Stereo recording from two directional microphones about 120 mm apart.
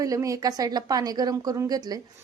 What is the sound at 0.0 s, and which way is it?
A woman's voice, 30° right (ahead or behind).